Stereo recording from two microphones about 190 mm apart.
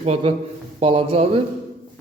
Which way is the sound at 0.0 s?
30° right (ahead or behind).